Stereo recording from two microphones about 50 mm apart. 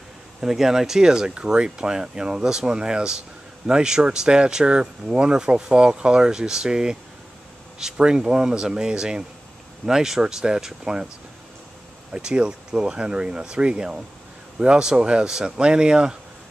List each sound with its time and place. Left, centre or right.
0.4 s speech: centre
12.1 s speech: centre